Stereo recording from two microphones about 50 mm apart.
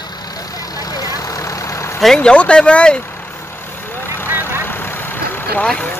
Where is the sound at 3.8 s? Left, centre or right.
Left.